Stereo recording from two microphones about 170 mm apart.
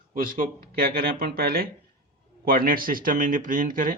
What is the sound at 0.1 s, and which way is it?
Speech, 55° right (ahead or behind).